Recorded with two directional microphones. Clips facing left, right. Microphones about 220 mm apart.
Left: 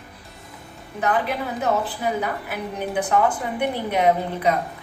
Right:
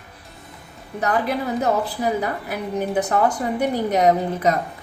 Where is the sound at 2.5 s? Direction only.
40° right (ahead or behind).